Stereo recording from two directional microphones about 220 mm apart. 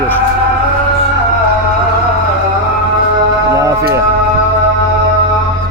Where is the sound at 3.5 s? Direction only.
15° right (ahead or behind).